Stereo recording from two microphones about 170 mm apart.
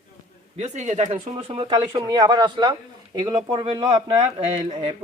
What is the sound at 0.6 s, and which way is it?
Speech, 45° right (ahead or behind).